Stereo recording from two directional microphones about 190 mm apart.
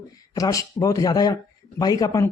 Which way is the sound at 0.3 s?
20° left (ahead or behind).